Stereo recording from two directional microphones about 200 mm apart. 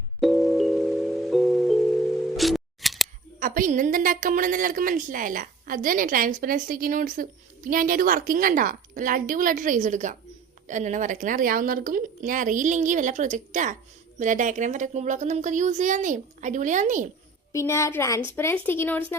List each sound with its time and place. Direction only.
0.2 s music: centre (ahead or behind)
3.4 s a woman's voice: 40° right (ahead or behind)
17.5 s a woman's voice: 15° left (ahead or behind)